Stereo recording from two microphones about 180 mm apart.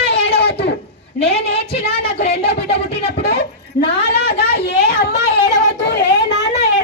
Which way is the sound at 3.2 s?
65° left (ahead or behind).